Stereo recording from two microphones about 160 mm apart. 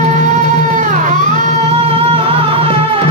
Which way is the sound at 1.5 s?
40° right (ahead or behind).